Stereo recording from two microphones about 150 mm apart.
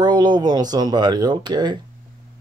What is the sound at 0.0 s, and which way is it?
Speech, 30° right (ahead or behind).